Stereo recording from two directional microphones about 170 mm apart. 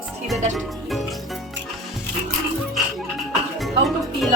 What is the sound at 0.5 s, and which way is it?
Music, centre (ahead or behind).